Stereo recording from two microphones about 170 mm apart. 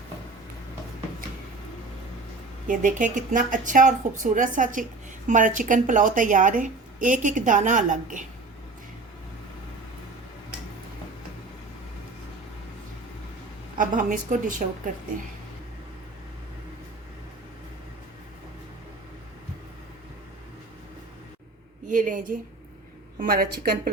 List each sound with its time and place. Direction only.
2.6 s a woman's voice: 50° right (ahead or behind)
13.7 s a woman's voice: 50° right (ahead or behind)
21.8 s a woman's voice: 50° right (ahead or behind)
23.1 s a woman's voice: 60° right (ahead or behind)